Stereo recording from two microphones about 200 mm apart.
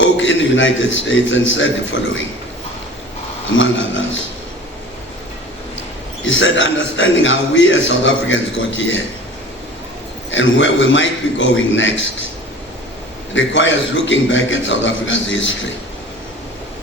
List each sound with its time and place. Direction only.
0.0 s a man's voice: 70° left (ahead or behind)
3.6 s a man's voice: 70° left (ahead or behind)
6.2 s a man's voice: 70° left (ahead or behind)
10.3 s a man's voice: 70° left (ahead or behind)
13.3 s a man's voice: 65° left (ahead or behind)